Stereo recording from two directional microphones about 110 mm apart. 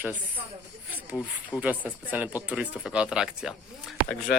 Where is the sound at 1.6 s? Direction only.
15° right (ahead or behind).